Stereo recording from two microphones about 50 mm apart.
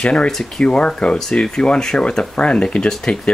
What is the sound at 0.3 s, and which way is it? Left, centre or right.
Speech, centre.